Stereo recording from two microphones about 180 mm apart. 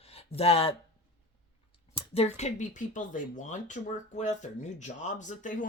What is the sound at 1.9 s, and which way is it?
Speech, 35° left (ahead or behind).